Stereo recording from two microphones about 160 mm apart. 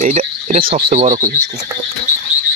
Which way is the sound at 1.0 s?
50° right (ahead or behind).